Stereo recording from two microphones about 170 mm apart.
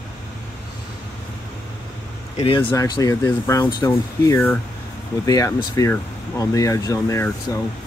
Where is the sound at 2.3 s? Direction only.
35° left (ahead or behind).